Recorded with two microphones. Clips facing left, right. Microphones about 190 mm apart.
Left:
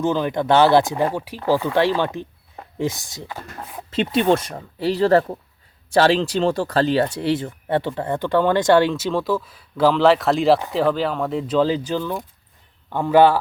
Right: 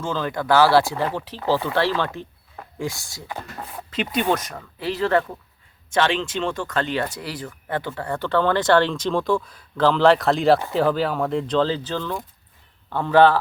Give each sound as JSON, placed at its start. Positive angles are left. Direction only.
{"t": 0.0, "sound": "speech", "side_deg": 20}